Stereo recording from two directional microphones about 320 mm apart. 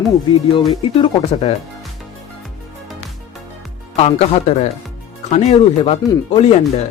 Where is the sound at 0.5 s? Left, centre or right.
Centre.